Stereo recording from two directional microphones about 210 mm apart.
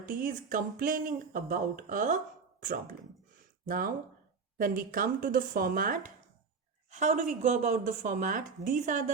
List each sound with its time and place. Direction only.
0.0 s speech: 40° right (ahead or behind)